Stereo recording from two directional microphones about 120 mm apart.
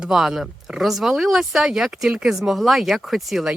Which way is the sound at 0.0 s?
5° right (ahead or behind).